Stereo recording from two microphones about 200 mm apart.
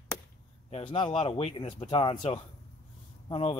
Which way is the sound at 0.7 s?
30° left (ahead or behind).